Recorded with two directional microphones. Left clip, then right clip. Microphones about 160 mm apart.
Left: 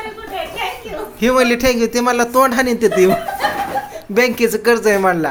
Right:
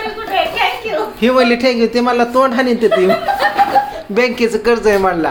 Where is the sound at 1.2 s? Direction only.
15° left (ahead or behind).